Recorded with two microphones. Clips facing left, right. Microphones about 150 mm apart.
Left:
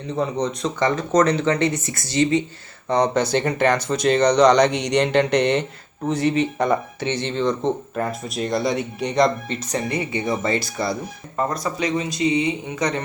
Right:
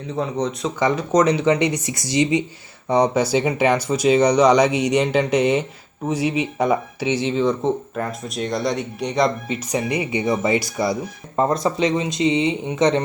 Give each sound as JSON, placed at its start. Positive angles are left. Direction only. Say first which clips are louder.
{"t": 0.1, "sound": "speech", "louder": "even", "side_deg": 0}
{"t": 11.3, "sound": "speech", "louder": "right 5 dB", "side_deg": -25}